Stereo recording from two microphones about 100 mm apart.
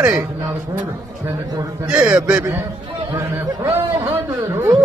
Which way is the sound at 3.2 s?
25° right (ahead or behind).